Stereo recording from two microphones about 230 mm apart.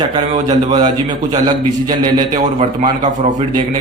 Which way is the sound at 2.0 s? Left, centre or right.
Right.